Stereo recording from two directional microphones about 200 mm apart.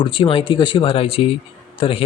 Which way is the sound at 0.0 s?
25° left (ahead or behind).